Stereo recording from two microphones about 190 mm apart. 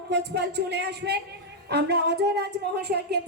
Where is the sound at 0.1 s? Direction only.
60° right (ahead or behind).